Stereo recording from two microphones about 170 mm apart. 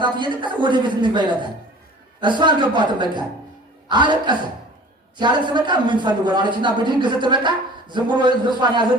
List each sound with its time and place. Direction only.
0.0 s speech: 25° right (ahead or behind)